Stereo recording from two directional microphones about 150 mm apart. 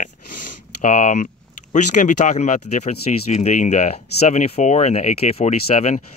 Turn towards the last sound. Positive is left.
turn(degrees=50)  # may be behind; listen again after turning